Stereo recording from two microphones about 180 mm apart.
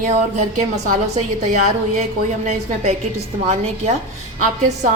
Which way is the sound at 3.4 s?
40° right (ahead or behind).